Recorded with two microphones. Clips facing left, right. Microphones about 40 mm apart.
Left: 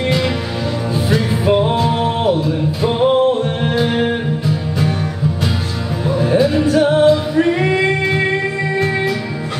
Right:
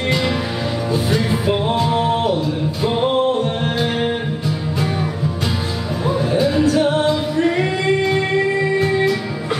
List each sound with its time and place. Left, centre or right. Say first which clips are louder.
0.9 s music: left 1 dB; centre
6.2 s music: left 3 dB; centre
7.3 s singing: left 3 dB; centre
8.7 s music: left 1 dB; centre